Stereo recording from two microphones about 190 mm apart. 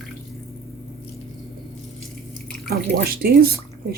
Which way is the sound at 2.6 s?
55° right (ahead or behind).